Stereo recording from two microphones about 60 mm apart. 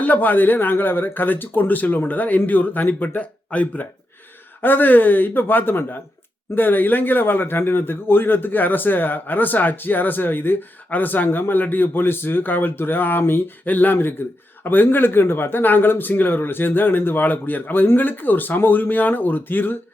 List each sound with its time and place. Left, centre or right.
0.0 s speech: left